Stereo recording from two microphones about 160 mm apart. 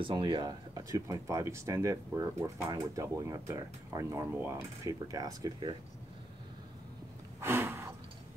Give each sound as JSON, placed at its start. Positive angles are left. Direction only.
{"t": 0.0, "sound": "speech", "side_deg": -30}
{"t": 7.3, "sound": "gasp", "side_deg": -15}